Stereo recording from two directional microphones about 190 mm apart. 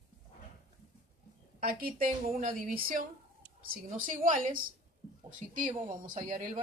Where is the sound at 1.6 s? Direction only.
50° right (ahead or behind).